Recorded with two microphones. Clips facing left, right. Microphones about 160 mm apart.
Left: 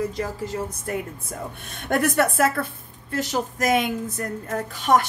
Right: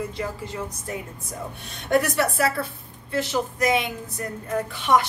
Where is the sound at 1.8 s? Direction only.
50° left (ahead or behind).